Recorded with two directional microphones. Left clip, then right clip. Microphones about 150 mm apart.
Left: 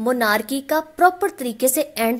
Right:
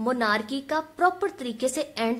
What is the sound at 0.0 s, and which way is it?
A woman's voice, 40° left (ahead or behind).